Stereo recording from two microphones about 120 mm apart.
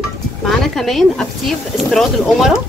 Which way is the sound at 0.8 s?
Centre (ahead or behind).